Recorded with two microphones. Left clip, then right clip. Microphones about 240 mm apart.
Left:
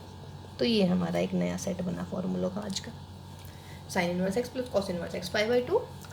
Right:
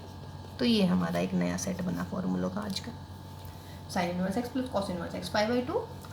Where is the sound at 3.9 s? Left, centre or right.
Left.